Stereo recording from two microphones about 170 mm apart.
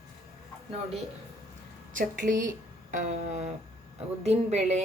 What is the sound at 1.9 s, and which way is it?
A woman's voice, 50° right (ahead or behind).